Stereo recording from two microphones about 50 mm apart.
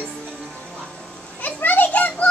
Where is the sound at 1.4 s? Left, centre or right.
Left.